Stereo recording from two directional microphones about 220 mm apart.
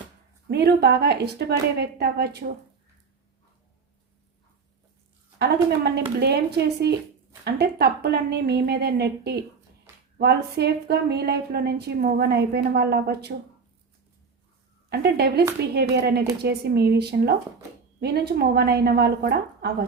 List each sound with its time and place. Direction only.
0.5 s a woman's voice: 45° right (ahead or behind)
5.4 s a woman's voice: 50° right (ahead or behind)
14.8 s a woman's voice: 50° right (ahead or behind)